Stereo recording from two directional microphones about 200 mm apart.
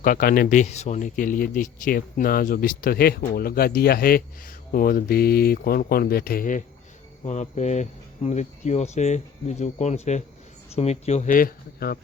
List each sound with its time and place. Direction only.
0.0 s speech: 45° left (ahead or behind)
7.3 s speech: 35° left (ahead or behind)